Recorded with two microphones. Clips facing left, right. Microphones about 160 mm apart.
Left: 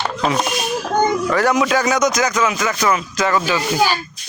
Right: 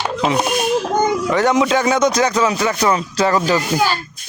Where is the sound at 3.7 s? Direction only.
10° left (ahead or behind).